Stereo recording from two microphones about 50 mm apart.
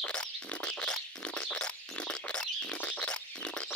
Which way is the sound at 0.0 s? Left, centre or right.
Left.